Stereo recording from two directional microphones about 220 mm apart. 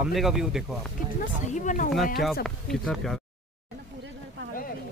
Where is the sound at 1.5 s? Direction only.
35° left (ahead or behind).